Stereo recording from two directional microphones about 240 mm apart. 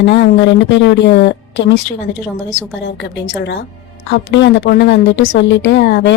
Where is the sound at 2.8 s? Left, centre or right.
Left.